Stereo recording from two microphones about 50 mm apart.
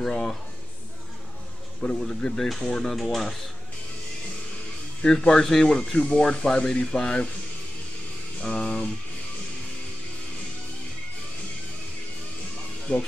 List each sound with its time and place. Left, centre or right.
0.0 s a sound: centre
1.8 s speech: centre
5.3 s speech: centre
8.4 s music: left
12.9 s music: centre